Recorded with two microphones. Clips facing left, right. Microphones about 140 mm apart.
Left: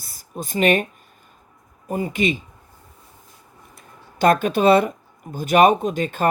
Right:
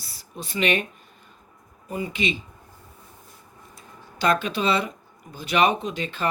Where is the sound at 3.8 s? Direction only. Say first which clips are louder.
Left 7 dB; 50° left (ahead or behind).